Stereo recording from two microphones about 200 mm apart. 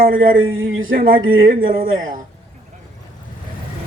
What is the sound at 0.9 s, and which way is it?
Speech, 45° right (ahead or behind).